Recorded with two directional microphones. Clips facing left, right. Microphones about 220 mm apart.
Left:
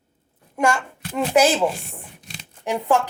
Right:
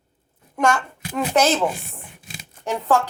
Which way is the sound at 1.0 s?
5° right (ahead or behind).